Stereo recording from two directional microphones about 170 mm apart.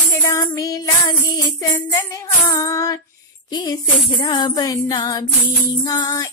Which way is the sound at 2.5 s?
20° left (ahead or behind).